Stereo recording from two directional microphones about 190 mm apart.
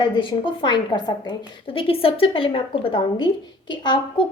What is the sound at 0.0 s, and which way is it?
A woman's voice, 25° left (ahead or behind).